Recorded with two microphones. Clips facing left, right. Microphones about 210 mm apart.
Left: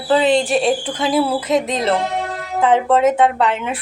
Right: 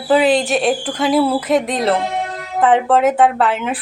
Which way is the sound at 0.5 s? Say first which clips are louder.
Even; centre (ahead or behind).